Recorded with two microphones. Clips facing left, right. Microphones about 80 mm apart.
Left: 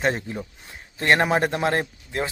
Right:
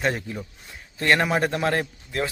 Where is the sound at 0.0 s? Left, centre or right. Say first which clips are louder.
Left 2 dB; left.